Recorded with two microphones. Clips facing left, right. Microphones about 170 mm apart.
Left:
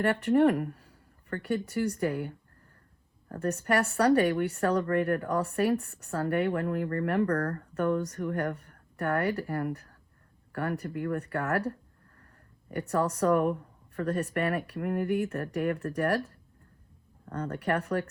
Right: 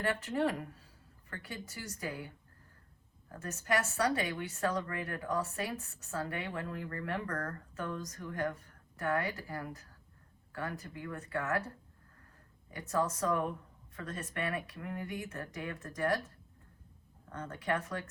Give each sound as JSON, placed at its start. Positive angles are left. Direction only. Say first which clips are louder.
{"t": 0.0, "sound": "speech", "louder": "left 9 dB", "side_deg": 60}
{"t": 3.4, "sound": "speech", "louder": "left 7 dB", "side_deg": 65}
{"t": 7.3, "sound": "speech", "louder": "left 10 dB", "side_deg": 40}
{"t": 7.7, "sound": "speech", "louder": "left 12 dB", "side_deg": 65}
{"t": 17.3, "sound": "speech", "louder": "left 6 dB", "side_deg": 65}